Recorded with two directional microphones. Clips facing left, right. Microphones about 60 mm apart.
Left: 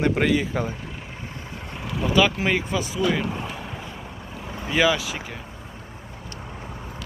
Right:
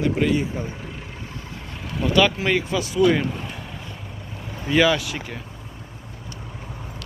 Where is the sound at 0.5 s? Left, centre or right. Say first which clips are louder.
Left 4 dB; left.